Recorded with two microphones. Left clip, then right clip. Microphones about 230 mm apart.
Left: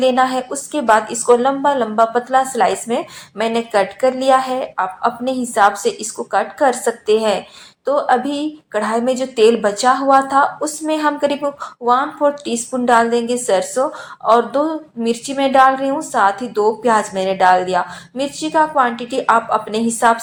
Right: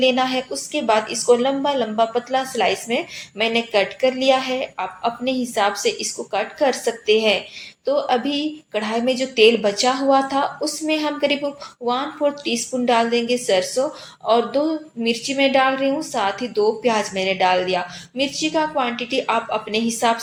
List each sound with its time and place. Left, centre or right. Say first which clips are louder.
0.0 s a woman's voice: left 4 dB; left